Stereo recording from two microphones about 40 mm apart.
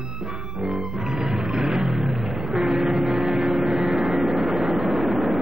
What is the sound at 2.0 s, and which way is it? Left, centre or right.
Vehicle, centre.